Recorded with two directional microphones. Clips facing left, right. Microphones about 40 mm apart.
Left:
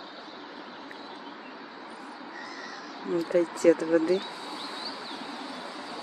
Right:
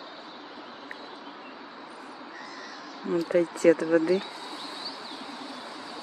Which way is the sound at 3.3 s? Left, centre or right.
Right.